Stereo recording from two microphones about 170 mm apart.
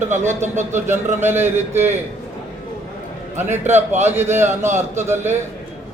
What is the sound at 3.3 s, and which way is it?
Speech, 40° right (ahead or behind).